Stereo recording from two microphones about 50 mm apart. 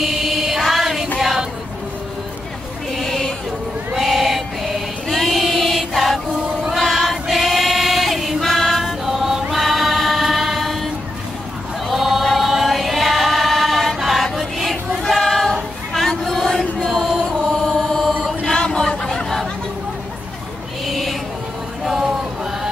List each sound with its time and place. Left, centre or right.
0.0 s music: centre
1.2 s a sound: centre
2.9 s sheep: centre
3.9 s a sound: centre
6.7 s choir: centre
9.0 s chant: centre
11.9 s chant: centre
16.3 s music: centre
16.8 s chant: centre
18.4 s a sound: centre
20.8 s a sound: centre
21.8 s chant: centre